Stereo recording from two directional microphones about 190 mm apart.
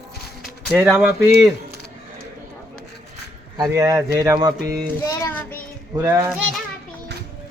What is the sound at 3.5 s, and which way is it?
Speech, 20° right (ahead or behind).